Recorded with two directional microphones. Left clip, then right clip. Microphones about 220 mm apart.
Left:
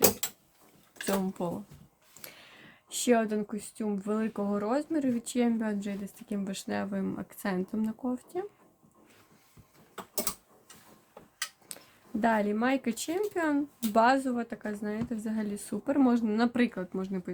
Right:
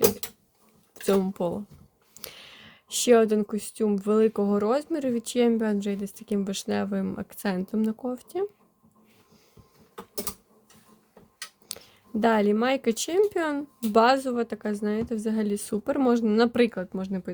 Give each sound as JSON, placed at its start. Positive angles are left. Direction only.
{"t": 1.0, "sound": "speech", "side_deg": -45}
{"t": 12.2, "sound": "speech", "side_deg": -45}